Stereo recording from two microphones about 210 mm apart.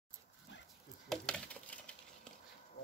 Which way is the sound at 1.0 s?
Centre (ahead or behind).